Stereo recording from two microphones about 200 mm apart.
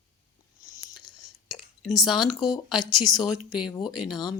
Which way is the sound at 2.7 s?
20° left (ahead or behind).